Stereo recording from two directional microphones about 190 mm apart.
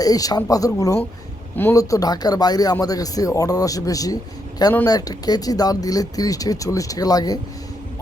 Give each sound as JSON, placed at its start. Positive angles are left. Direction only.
{"t": 0.0, "sound": "speech", "side_deg": 20}